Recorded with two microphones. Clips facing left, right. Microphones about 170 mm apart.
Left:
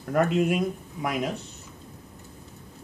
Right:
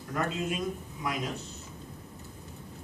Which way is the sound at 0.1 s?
60° left (ahead or behind).